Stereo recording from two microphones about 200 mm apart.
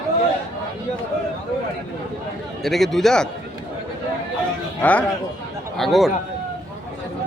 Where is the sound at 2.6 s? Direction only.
Centre (ahead or behind).